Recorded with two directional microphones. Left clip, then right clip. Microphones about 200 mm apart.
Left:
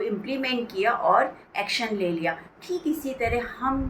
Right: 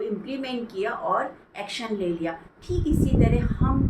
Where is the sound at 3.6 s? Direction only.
5° right (ahead or behind).